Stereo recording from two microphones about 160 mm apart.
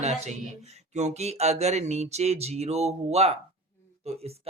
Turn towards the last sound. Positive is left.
turn(degrees=-40)  # may be behind; listen again after turning